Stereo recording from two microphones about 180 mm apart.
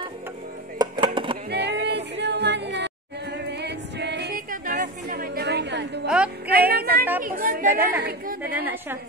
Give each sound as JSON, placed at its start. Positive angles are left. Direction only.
{"t": 0.7, "sound": "music", "side_deg": -25}
{"t": 1.5, "sound": "music", "side_deg": -70}
{"t": 4.5, "sound": "a sound", "side_deg": -60}
{"t": 6.0, "sound": "music", "side_deg": -5}
{"t": 6.7, "sound": "a sound", "side_deg": -60}
{"t": 7.2, "sound": "speech", "side_deg": -50}
{"t": 7.8, "sound": "a woman's voice", "side_deg": -10}